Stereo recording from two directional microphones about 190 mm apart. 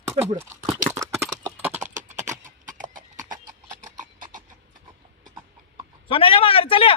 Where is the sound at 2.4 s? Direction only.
45° right (ahead or behind).